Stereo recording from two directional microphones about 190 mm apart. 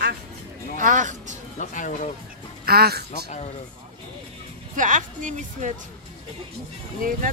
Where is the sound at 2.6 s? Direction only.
55° right (ahead or behind).